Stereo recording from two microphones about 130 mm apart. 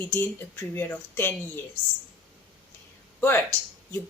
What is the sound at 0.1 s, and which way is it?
Speech, 15° left (ahead or behind).